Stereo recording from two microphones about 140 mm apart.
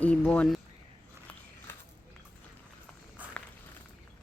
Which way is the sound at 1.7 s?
15° left (ahead or behind).